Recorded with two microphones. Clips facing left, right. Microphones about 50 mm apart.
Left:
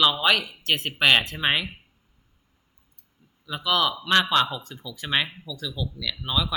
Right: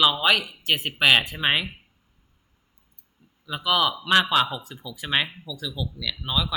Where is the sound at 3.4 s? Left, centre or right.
Centre.